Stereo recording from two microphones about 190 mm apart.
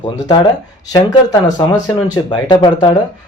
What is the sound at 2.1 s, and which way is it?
Speech, 20° left (ahead or behind).